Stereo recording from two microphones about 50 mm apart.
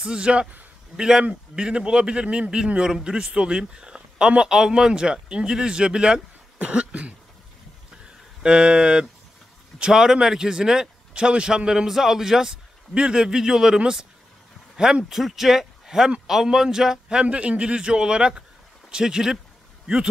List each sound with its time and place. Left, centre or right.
0.0 s a man's voice: centre
8.4 s a man's voice: centre